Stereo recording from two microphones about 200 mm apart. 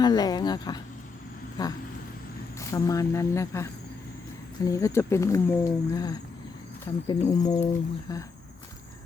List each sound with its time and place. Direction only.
0.0 s speech: 20° left (ahead or behind)
7.1 s speech: 35° left (ahead or behind)
7.3 s speech: 20° left (ahead or behind)